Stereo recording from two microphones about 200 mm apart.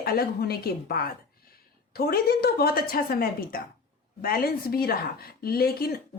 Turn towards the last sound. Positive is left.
turn(degrees=50)  # may be behind; listen again after turning